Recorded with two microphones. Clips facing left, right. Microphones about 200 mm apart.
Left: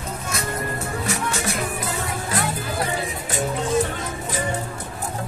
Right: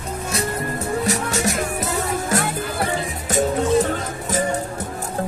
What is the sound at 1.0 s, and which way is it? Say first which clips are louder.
Music: right 2 dB; 40° right (ahead or behind).